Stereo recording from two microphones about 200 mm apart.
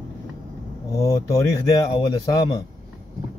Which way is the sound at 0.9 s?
15° left (ahead or behind).